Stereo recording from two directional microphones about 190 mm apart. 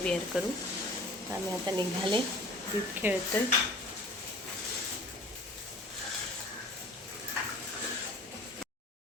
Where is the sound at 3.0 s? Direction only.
10° right (ahead or behind).